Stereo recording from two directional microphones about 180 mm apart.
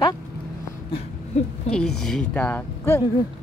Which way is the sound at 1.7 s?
5° left (ahead or behind).